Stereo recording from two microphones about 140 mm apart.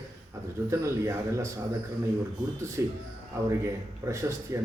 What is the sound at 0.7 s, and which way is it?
Speech, 20° right (ahead or behind).